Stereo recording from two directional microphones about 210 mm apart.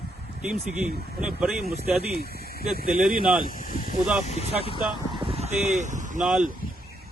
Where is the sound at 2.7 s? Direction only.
45° right (ahead or behind).